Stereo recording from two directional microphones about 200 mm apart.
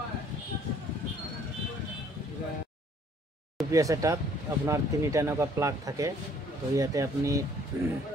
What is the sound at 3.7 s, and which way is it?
Speech, 15° right (ahead or behind).